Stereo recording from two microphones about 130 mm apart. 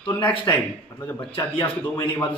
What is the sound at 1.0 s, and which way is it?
Speech, 15° left (ahead or behind).